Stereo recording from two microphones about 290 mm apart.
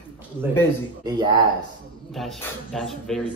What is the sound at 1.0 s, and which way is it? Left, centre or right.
Speech, centre.